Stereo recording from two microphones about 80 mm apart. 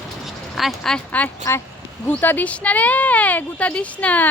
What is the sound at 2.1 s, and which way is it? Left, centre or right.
Speech, left.